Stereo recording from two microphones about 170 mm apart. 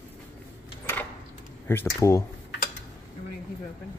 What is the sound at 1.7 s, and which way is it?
Speech, 15° left (ahead or behind).